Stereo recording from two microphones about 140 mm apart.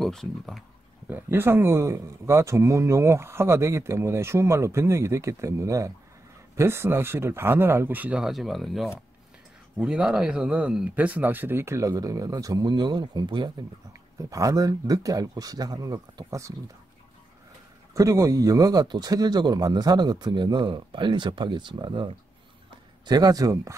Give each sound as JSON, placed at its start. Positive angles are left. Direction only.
{"t": 0.0, "sound": "speech", "side_deg": 0}
{"t": 1.0, "sound": "speech", "side_deg": -15}
{"t": 17.9, "sound": "speech", "side_deg": -25}